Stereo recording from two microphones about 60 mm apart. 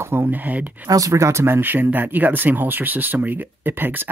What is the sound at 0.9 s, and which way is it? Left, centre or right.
Speech, right.